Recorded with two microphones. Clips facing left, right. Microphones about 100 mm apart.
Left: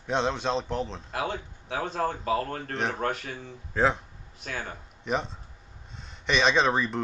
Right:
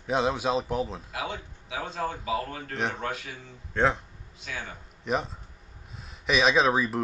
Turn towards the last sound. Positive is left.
turn(degrees=-5)  # may be behind; listen again after turning